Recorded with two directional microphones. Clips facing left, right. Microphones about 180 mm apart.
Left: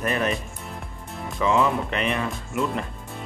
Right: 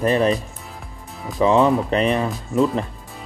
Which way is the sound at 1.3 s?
35° right (ahead or behind).